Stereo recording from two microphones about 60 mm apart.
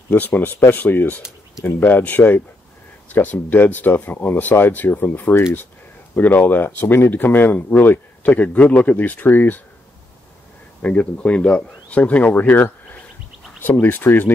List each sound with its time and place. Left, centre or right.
0.1 s speech: left
10.8 s speech: left